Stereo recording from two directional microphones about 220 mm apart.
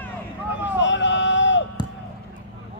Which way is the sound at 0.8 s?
55° left (ahead or behind).